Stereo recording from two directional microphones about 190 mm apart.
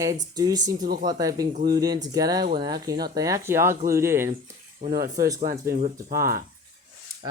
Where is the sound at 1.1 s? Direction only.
20° right (ahead or behind).